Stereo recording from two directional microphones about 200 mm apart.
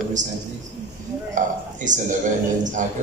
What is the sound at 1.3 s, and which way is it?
Speech, 40° right (ahead or behind).